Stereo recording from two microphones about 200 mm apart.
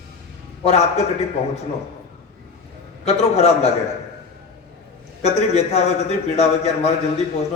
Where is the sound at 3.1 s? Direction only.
30° left (ahead or behind).